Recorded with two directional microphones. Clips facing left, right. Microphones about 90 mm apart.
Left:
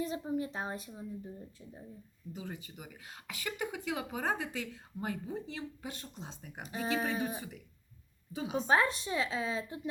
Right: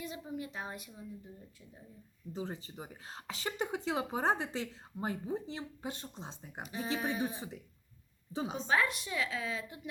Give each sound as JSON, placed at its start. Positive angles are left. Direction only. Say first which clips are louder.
{"t": 0.0, "sound": "a woman's voice", "louder": "left 6 dB", "side_deg": 35}
{"t": 2.3, "sound": "speech", "louder": "right 3 dB", "side_deg": -30}
{"t": 6.7, "sound": "a woman's voice", "louder": "left 3 dB", "side_deg": 40}
{"t": 7.2, "sound": "speech", "louder": "even", "side_deg": -25}
{"t": 8.6, "sound": "a woman's voice", "louder": "left 3 dB", "side_deg": 30}